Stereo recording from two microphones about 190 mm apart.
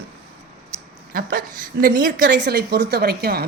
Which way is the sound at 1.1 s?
50° right (ahead or behind).